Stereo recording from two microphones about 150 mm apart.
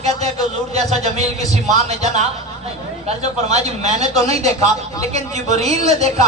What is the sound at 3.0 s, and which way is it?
A man's voice, 45° right (ahead or behind).